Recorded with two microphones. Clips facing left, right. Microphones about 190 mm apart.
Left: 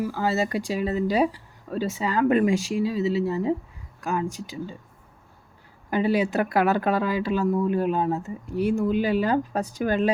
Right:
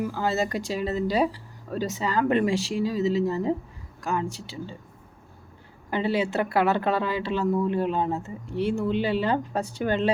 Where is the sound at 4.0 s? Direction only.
10° left (ahead or behind).